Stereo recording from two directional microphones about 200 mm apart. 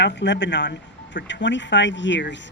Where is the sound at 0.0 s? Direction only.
60° left (ahead or behind).